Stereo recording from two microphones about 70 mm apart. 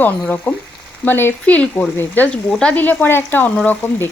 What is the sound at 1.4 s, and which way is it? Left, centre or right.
Speech, centre.